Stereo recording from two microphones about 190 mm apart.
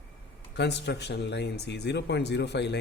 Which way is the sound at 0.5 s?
65° left (ahead or behind).